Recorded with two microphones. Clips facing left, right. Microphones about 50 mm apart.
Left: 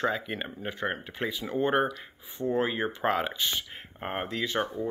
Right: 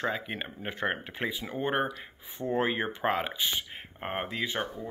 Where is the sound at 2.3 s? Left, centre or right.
Right.